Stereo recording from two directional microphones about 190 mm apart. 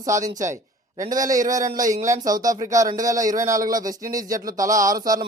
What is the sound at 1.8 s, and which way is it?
Speech, 40° right (ahead or behind).